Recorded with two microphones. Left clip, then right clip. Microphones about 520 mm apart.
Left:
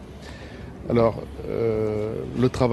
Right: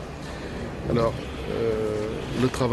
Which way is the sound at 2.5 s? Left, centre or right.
Right.